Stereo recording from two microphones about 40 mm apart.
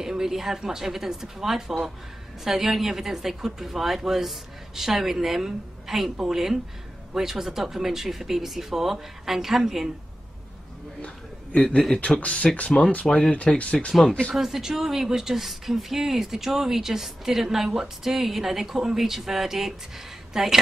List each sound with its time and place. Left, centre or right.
0.0 s speech: centre
11.5 s speech: left
14.3 s speech: centre